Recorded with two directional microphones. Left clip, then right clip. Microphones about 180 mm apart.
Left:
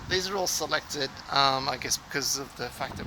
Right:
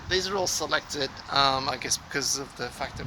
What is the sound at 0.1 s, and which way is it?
Speech, 15° left (ahead or behind).